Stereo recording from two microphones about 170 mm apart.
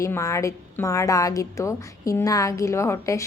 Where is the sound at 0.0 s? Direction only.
15° left (ahead or behind).